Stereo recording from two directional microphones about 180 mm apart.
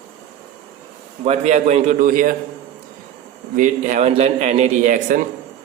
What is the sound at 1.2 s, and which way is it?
A man's voice, 40° right (ahead or behind).